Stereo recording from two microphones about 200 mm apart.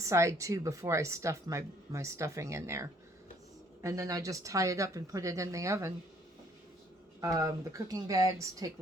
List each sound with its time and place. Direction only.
0.0 s speech: 15° right (ahead or behind)
7.2 s speech: 15° right (ahead or behind)